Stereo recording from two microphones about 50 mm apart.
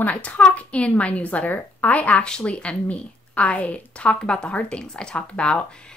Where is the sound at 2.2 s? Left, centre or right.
Left.